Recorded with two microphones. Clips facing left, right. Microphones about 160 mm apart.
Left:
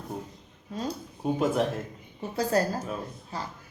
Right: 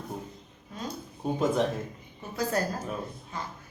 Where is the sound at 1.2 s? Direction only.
5° left (ahead or behind).